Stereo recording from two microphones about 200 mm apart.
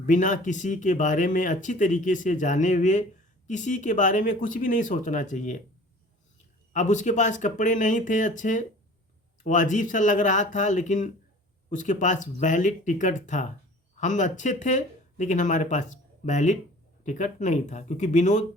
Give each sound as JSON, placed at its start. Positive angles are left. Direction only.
{"t": 0.0, "sound": "speech", "side_deg": 40}
{"t": 6.7, "sound": "speech", "side_deg": 35}